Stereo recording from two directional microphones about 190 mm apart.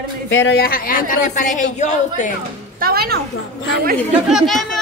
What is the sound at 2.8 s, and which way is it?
Speech, 55° right (ahead or behind).